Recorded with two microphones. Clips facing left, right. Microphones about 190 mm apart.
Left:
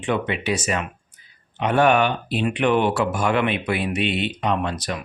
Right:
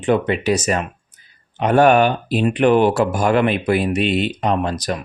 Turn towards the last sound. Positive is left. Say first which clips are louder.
# right 4 dB
turn(degrees=-40)  # may be behind; listen again after turning